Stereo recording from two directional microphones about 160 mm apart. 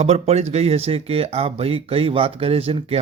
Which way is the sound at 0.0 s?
40° right (ahead or behind).